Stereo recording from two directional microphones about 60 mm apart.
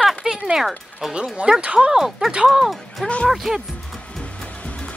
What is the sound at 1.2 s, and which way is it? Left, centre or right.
Speech, centre.